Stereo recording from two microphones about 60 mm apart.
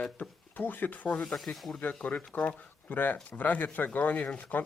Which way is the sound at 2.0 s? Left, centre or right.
Left.